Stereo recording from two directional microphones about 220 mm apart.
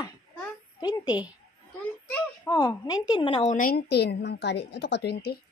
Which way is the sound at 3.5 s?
40° left (ahead or behind).